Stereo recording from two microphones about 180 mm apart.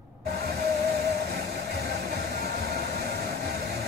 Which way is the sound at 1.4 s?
65° right (ahead or behind).